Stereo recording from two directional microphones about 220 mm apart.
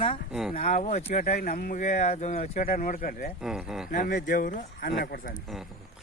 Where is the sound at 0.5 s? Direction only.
30° left (ahead or behind).